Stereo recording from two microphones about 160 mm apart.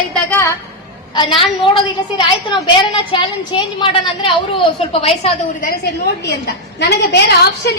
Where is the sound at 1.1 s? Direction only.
35° left (ahead or behind).